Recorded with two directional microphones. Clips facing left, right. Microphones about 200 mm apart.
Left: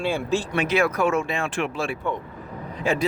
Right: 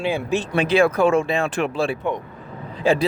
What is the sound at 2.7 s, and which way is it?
Speech, 30° right (ahead or behind).